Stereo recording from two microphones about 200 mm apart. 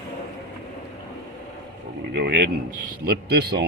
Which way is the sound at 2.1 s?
55° right (ahead or behind).